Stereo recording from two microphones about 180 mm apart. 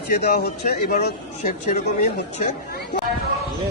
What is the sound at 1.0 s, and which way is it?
Speech, 45° left (ahead or behind).